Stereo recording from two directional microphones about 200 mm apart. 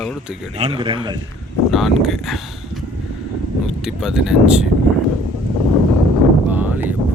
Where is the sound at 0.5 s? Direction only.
30° right (ahead or behind).